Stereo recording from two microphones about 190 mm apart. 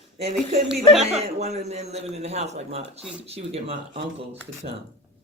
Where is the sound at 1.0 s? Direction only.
35° right (ahead or behind).